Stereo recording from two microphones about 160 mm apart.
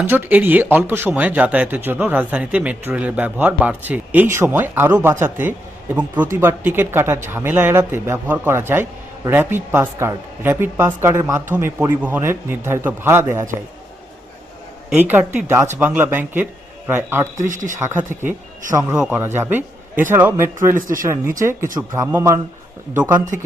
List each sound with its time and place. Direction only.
0.0 s speech: 10° right (ahead or behind)
14.8 s speech: 10° right (ahead or behind)
17.3 s speech: 50° right (ahead or behind)
17.7 s speech: 15° right (ahead or behind)
20.7 s speech: 55° right (ahead or behind)
21.8 s speech: 15° right (ahead or behind)